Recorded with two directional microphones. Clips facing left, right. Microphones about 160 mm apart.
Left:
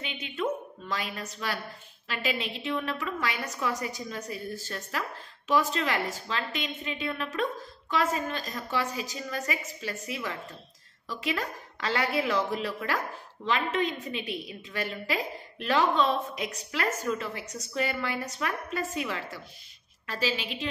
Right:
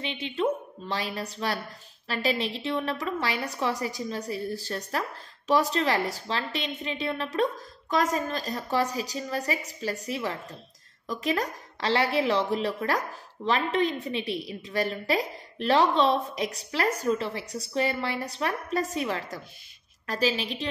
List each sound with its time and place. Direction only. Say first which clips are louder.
0.0 s a woman's voice: right 4 dB; 30° right (ahead or behind)